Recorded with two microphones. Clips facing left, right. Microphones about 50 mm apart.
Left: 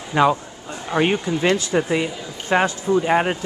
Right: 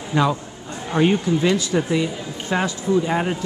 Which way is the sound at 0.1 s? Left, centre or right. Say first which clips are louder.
Left 3 dB; centre.